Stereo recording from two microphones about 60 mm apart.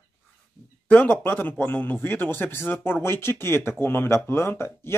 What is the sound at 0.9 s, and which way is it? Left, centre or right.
Speech, left.